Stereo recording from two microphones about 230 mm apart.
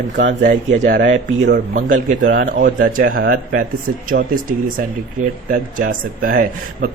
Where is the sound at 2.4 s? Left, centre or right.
Right.